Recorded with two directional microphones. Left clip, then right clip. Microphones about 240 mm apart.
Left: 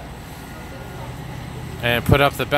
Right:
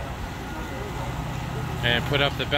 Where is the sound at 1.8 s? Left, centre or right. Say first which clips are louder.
Left 6 dB; left.